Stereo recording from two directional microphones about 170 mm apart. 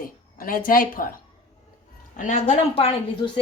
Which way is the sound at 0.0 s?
55° left (ahead or behind).